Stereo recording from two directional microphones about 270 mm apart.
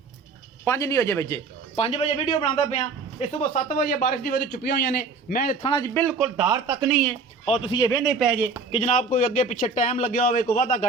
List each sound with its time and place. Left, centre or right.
0.6 s a man's voice: centre; by 5.5 s left
5.9 s speech: centre
6.2 s speech: centre
7.4 s speech: left
7.9 s speech: centre
8.7 s speech: left